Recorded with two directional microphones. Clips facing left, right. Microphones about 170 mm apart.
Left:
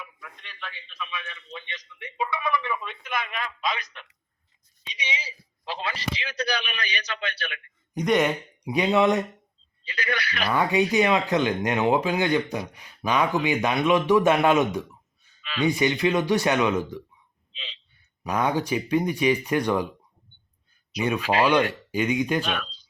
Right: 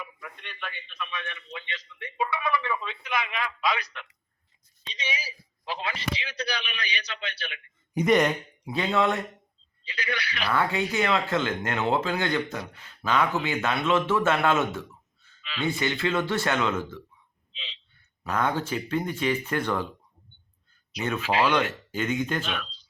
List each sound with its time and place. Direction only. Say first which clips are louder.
0.0 s a man's voice: right 3 dB; centre (ahead or behind)
1.7 s speech: right 1 dB; 15° left (ahead or behind)
2.3 s a sound: left 2 dB; 15° left (ahead or behind)
3.0 s a man's voice: right 1 dB; 50° left (ahead or behind)
3.6 s a man's voice: right 2 dB; 25° left (ahead or behind)
4.9 s a man's voice: even; 20° left (ahead or behind); by 7.6 s 55° left (ahead or behind)
7.9 s speech: right 1 dB; centre (ahead or behind)
8.6 s speech: left 4 dB; 15° left (ahead or behind)
9.8 s a man's voice: left 3 dB; 50° left (ahead or behind)
10.5 s speech: left 4 dB; 15° left (ahead or behind)
17.5 s a sound: left 2 dB; 50° left (ahead or behind)
17.9 s speech: left 2 dB; 15° left (ahead or behind)
21.0 s speech: left 3 dB; 15° left (ahead or behind)